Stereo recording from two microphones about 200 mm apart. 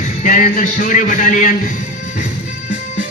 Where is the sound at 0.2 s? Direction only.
40° left (ahead or behind).